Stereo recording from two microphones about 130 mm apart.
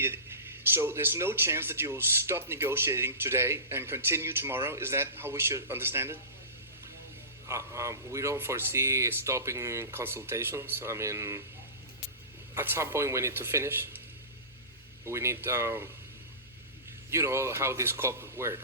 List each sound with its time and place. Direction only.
0.7 s speech: 20° right (ahead or behind)
7.4 s speech: 25° right (ahead or behind)
12.5 s speech: 20° right (ahead or behind)
15.0 s speech: 20° right (ahead or behind)
17.1 s speech: 20° right (ahead or behind)